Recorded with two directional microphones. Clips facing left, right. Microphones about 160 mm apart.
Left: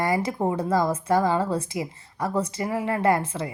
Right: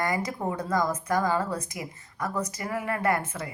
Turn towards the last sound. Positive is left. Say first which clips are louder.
# left 5 dB
turn(degrees=30)  # may be behind; listen again after turning